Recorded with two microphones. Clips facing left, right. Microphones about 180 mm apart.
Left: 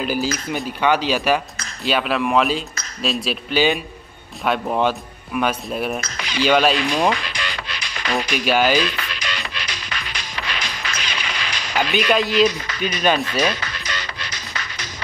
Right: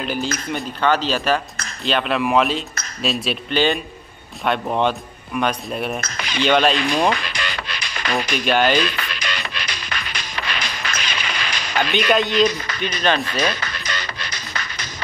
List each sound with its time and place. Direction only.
0.0 s speech: 5° left (ahead or behind)
5.9 s speech: 50° right (ahead or behind)
6.4 s speech: 5° left (ahead or behind)
7.2 s music: 55° right (ahead or behind)
8.2 s speech: 5° left (ahead or behind)
8.8 s music: 55° right (ahead or behind)
11.9 s speech: centre (ahead or behind)
13.6 s music: 50° right (ahead or behind)